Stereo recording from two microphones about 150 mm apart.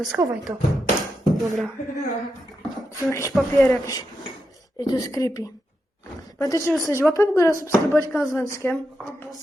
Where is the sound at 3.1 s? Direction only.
20° left (ahead or behind).